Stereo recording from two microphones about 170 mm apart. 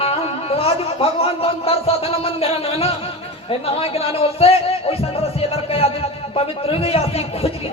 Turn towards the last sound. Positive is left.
turn(degrees=35)  # may be behind; listen again after turning